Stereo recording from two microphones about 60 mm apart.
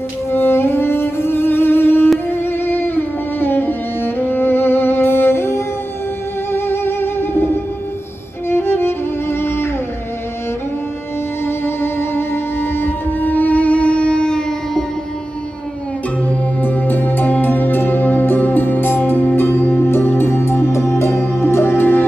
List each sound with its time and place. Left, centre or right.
0.3 s music: left
11.4 s music: left; by 14.9 s centre
16.6 s music: left